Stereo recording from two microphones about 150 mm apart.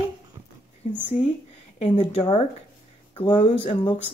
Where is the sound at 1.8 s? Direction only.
40° left (ahead or behind).